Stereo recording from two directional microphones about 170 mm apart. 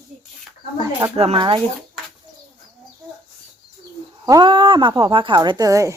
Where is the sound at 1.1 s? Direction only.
35° right (ahead or behind).